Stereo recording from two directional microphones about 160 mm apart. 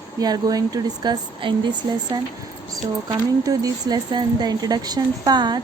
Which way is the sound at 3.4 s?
25° right (ahead or behind).